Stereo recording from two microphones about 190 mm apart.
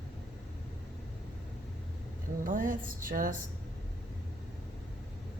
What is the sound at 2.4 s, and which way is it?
Speech, 45° right (ahead or behind).